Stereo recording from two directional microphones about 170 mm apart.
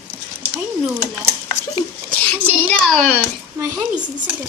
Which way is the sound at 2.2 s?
5° left (ahead or behind).